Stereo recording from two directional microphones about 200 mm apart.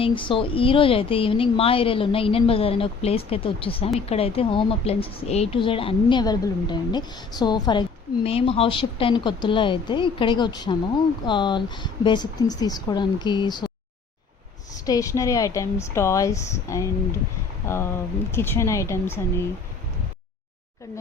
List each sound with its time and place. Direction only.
0.0 s speech: 25° left (ahead or behind)
14.8 s speech: 15° left (ahead or behind)